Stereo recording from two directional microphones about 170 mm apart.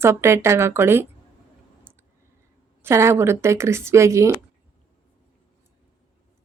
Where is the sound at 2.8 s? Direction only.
15° right (ahead or behind).